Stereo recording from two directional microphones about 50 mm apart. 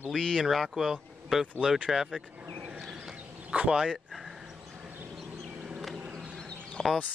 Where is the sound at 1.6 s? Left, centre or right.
Centre.